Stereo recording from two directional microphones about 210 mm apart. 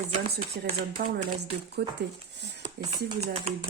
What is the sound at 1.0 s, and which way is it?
Speech, 45° right (ahead or behind).